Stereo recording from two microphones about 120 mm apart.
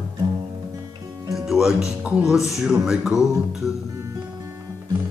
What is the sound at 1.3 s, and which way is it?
Music, centre (ahead or behind).